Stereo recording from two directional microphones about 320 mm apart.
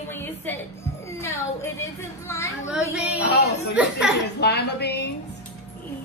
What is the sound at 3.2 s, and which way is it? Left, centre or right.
Speech, left.